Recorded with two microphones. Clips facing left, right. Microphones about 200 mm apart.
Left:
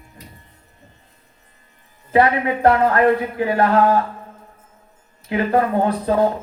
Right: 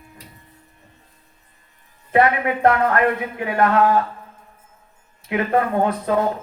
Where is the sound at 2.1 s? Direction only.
30° left (ahead or behind).